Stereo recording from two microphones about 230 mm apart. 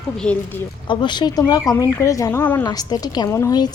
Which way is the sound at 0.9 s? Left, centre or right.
Centre.